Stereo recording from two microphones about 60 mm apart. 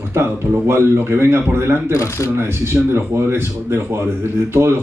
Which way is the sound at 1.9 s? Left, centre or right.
Left.